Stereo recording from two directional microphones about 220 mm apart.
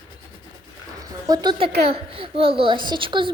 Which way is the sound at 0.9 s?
15° right (ahead or behind).